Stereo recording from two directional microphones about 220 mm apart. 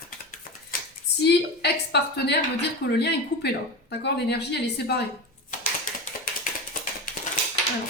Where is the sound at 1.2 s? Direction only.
50° left (ahead or behind).